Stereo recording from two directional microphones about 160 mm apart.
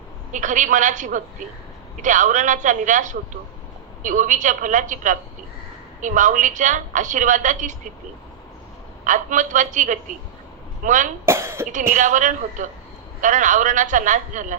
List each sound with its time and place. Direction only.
0.3 s a woman's voice: 50° right (ahead or behind)
9.0 s a woman's voice: 50° right (ahead or behind)
11.2 s cough: 15° right (ahead or behind)
11.9 s a woman's voice: 50° right (ahead or behind)